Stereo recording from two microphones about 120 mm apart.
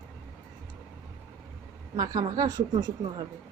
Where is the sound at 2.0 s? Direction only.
30° right (ahead or behind).